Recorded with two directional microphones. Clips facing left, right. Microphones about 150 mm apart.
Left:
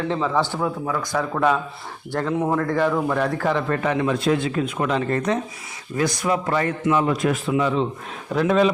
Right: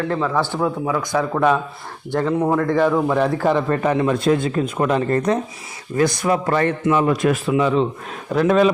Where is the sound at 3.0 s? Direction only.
25° right (ahead or behind).